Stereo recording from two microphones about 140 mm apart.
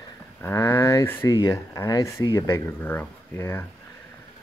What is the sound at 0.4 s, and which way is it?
Speech, 20° left (ahead or behind).